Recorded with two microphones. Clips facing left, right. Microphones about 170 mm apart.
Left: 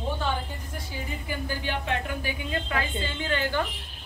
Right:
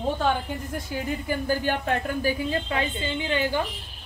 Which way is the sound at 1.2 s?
45° right (ahead or behind).